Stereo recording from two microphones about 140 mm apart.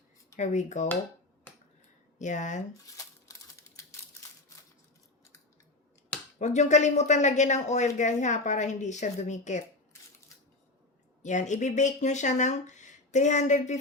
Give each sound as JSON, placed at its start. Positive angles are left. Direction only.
{"t": 0.3, "sound": "speech", "side_deg": 60}
{"t": 2.1, "sound": "speech", "side_deg": 60}
{"t": 2.8, "sound": "crumpling", "side_deg": 25}
{"t": 6.4, "sound": "speech", "side_deg": 55}
{"t": 11.2, "sound": "speech", "side_deg": 60}